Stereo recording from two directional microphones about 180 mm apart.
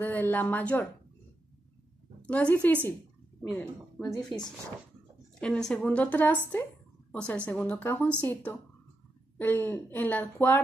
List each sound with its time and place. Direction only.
0.0 s speech: 10° left (ahead or behind)
2.2 s speech: 5° left (ahead or behind)